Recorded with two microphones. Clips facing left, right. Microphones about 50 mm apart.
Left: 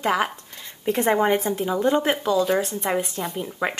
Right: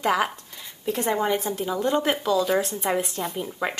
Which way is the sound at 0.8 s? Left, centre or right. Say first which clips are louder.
Left 4 dB; left.